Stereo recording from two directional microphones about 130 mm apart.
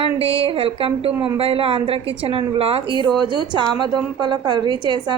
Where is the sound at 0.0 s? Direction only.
45° right (ahead or behind).